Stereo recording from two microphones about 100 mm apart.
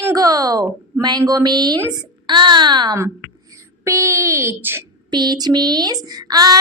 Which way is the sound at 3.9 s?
30° right (ahead or behind).